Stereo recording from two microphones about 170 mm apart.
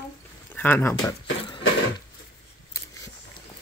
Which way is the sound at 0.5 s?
10° left (ahead or behind).